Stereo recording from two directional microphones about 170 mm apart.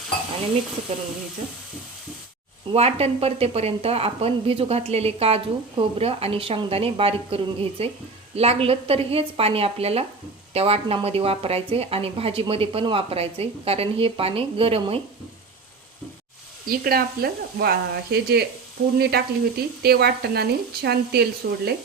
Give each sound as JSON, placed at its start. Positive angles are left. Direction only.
{"t": 2.7, "sound": "a woman's voice", "side_deg": -35}
{"t": 16.6, "sound": "speech", "side_deg": -60}